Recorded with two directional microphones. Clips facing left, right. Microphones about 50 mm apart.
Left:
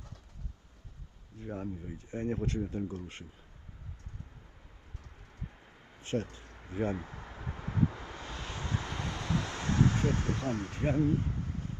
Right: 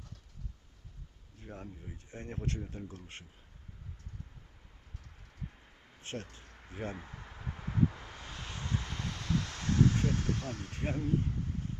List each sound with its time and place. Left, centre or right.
1.5 s speech: centre
2.0 s speech: left
5.4 s vehicle: centre
6.1 s speech: left
6.4 s a sound: centre; by 11.8 s left